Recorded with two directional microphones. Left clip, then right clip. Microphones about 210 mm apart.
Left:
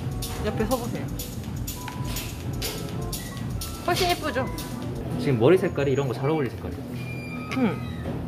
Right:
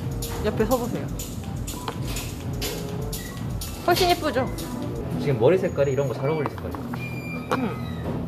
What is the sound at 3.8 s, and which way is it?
Speech, 10° right (ahead or behind).